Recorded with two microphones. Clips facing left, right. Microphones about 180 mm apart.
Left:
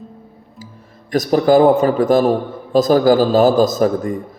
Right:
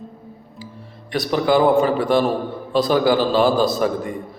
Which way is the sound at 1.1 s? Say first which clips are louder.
Left 5 dB; 40° left (ahead or behind).